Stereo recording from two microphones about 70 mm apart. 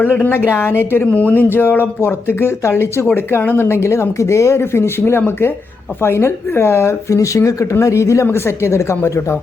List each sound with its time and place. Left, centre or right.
0.0 s speech: left